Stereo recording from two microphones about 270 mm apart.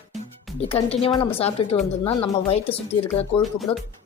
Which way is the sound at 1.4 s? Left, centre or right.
Centre.